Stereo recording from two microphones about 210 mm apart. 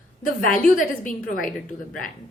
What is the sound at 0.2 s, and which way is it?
A woman's voice, 40° left (ahead or behind).